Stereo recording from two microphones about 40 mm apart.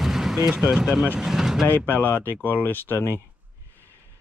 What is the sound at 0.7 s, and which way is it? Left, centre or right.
Speech, centre.